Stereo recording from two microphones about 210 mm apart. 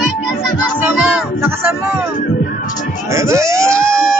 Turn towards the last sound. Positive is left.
turn(degrees=-15)  # may be behind; listen again after turning